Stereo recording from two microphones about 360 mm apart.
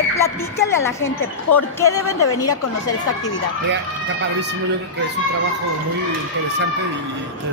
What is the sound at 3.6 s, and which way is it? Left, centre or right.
Speech, right.